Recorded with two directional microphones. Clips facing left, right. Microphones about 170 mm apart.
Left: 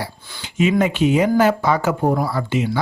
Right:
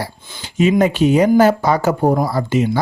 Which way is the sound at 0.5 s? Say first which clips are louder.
Right 3 dB; 40° right (ahead or behind).